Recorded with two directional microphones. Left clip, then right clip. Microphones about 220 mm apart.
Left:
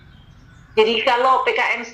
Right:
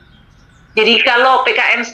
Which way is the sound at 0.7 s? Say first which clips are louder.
Right 6 dB; 50° right (ahead or behind).